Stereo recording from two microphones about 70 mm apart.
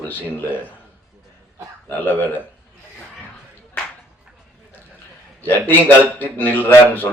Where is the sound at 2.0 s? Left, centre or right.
Left.